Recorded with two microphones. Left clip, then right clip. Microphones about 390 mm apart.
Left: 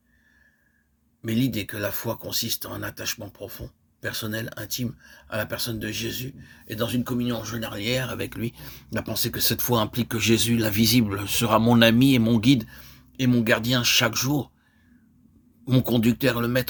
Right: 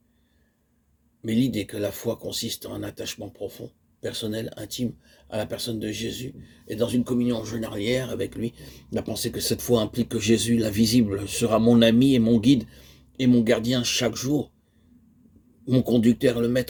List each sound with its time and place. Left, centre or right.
1.2 s speech: left
15.6 s speech: left